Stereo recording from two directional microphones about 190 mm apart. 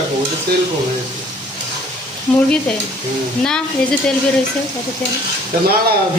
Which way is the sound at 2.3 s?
5° left (ahead or behind).